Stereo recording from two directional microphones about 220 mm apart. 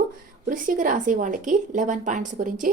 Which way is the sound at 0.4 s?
40° right (ahead or behind).